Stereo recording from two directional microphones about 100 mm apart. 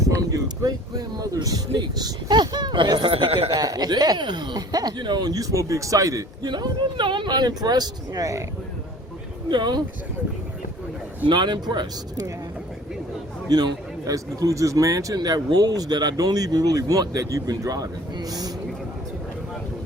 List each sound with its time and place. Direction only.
0.1 s speech: 35° right (ahead or behind); by 3.5 s 65° right (ahead or behind)
3.5 s speech: 40° right (ahead or behind)
9.5 s speech: 45° right (ahead or behind)
11.3 s speech: 50° right (ahead or behind)
13.5 s a man's voice: 40° right (ahead or behind)